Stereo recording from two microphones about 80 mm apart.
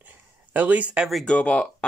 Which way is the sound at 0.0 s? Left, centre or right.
Right.